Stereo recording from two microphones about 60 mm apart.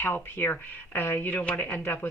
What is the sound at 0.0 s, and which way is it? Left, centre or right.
Speech, left.